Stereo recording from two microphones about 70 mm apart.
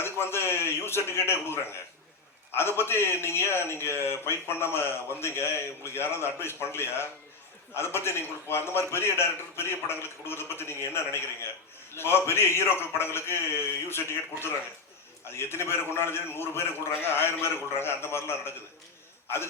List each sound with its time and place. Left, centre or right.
0.0 s a man's voice: left
2.6 s a man's voice: left
11.9 s a man's voice: left